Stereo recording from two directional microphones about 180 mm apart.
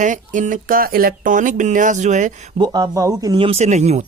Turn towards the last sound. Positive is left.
turn(degrees=-40)  # may be behind; listen again after turning